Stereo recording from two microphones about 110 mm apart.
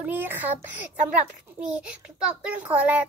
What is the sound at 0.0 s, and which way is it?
A child's voice, 15° right (ahead or behind).